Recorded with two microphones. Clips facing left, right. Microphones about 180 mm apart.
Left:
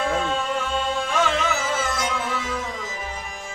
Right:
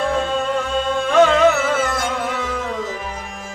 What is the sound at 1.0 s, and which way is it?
Music, 65° right (ahead or behind).